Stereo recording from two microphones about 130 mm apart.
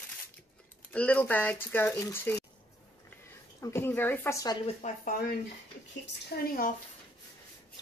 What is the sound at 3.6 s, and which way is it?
Speech, 20° left (ahead or behind).